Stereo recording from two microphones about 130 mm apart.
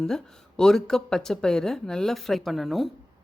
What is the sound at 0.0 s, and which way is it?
Speech, 5° left (ahead or behind).